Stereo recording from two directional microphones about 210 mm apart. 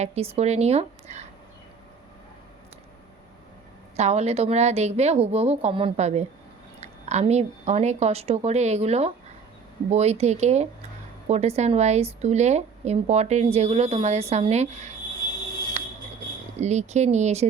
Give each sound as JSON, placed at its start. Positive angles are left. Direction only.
{"t": 0.0, "sound": "speech", "side_deg": -30}
{"t": 3.9, "sound": "speech", "side_deg": -30}
{"t": 15.8, "sound": "music", "side_deg": -30}
{"t": 16.6, "sound": "speech", "side_deg": -35}